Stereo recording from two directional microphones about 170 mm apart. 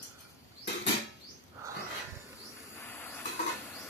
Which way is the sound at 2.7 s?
10° left (ahead or behind).